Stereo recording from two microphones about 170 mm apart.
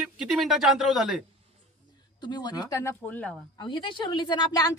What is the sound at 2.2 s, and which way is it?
A woman's voice, 25° left (ahead or behind).